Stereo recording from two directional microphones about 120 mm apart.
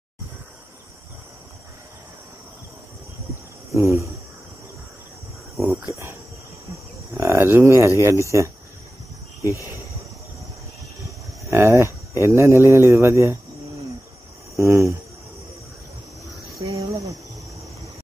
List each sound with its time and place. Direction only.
3.7 s speech: 25° right (ahead or behind)
7.2 s cricket: 20° right (ahead or behind)
8.0 s speech: 25° right (ahead or behind)
11.5 s speech: 25° right (ahead or behind)
14.6 s speech: 25° right (ahead or behind)
16.5 s cricket: 25° right (ahead or behind)